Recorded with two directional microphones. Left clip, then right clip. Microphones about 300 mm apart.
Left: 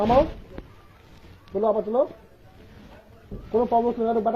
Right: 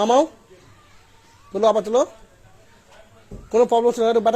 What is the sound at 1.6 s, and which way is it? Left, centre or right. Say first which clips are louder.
Speech: right 5 dB; right.